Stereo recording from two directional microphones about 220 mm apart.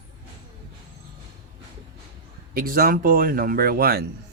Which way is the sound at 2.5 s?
40° right (ahead or behind).